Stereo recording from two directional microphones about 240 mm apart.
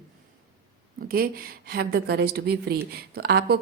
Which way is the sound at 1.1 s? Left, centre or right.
Right.